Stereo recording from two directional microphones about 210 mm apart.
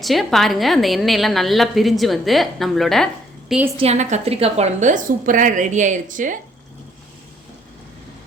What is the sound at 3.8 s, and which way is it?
A woman's voice, 30° right (ahead or behind).